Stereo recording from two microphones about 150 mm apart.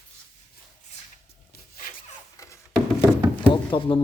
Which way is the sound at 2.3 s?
20° left (ahead or behind).